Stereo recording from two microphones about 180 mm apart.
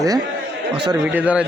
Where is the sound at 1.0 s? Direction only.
10° right (ahead or behind).